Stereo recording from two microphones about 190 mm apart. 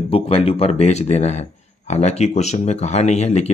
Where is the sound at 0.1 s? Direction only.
30° left (ahead or behind).